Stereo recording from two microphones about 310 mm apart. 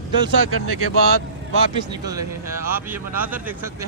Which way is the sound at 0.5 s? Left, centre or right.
Right.